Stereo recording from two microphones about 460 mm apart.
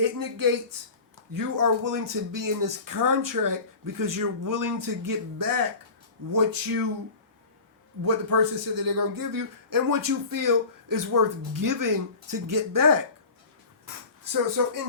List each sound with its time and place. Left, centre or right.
0.0 s speech: right
8.0 s speech: right
14.6 s speech: right